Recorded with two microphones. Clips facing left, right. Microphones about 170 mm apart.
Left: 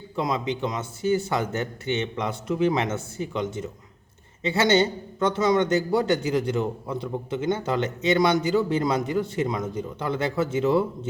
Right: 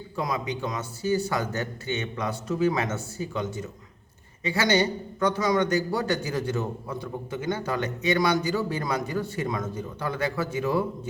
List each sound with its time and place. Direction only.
0.2 s a man's voice: 25° left (ahead or behind)